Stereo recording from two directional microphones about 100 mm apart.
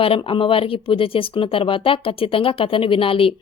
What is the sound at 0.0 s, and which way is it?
Speech, 65° left (ahead or behind).